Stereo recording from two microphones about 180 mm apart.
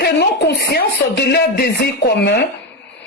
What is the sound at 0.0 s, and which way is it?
Speech, 65° left (ahead or behind).